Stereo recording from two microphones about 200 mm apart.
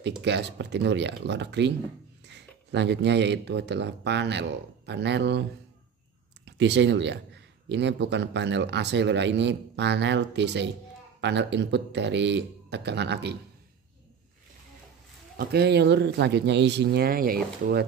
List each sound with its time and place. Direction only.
0.2 s speech: 60° right (ahead or behind)
6.4 s speech: 60° right (ahead or behind)
15.3 s speech: 55° right (ahead or behind)